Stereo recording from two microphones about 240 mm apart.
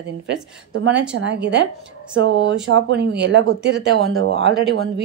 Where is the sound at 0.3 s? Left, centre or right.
Right.